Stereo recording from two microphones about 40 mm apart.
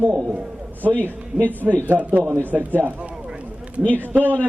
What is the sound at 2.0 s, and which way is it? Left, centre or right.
Speech, right.